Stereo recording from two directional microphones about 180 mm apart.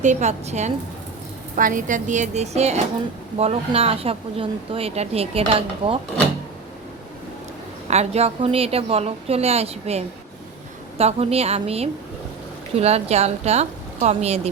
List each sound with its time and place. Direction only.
0.0 s a woman's voice: 40° right (ahead or behind)
7.9 s speech: 35° right (ahead or behind)